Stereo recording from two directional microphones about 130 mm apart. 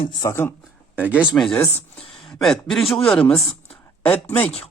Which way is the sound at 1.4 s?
Centre (ahead or behind).